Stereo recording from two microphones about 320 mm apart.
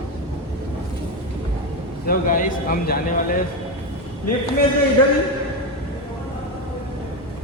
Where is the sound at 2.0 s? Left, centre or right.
Left.